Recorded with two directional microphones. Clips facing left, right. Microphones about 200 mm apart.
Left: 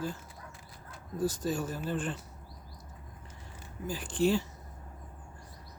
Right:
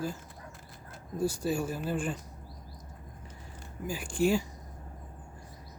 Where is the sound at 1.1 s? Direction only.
10° right (ahead or behind).